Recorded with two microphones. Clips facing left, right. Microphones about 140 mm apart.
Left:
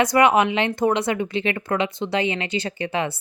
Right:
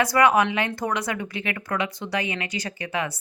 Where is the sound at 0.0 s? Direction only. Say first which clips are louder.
Left 2 dB; 20° left (ahead or behind).